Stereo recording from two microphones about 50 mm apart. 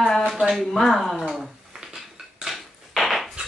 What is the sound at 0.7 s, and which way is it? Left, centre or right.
Speech, centre.